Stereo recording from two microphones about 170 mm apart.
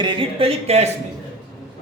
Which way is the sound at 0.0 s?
30° right (ahead or behind).